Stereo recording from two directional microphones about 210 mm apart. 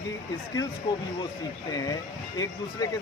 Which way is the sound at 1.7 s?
15° left (ahead or behind).